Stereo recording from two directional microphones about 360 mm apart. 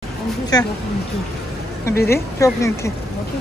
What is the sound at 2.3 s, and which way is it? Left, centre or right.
Speech, centre.